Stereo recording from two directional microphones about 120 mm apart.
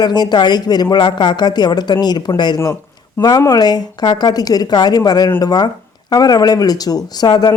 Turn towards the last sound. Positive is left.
turn(degrees=35)  # may be behind; listen again after turning